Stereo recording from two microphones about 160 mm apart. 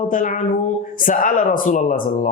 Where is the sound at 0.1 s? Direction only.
55° left (ahead or behind).